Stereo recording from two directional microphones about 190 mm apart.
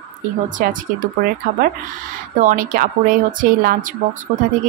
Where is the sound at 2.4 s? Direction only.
45° right (ahead or behind).